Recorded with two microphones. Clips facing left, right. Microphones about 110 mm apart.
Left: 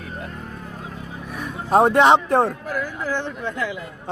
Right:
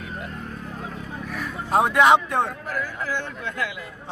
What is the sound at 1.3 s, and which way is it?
Vehicle, 20° left (ahead or behind).